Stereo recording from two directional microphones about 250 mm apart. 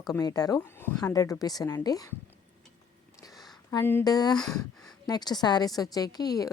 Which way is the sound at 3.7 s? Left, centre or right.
Centre.